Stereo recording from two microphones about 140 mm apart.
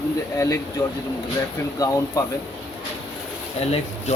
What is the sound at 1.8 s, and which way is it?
Speech, 25° left (ahead or behind).